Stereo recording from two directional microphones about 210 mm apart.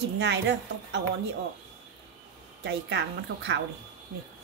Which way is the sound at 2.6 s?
55° right (ahead or behind).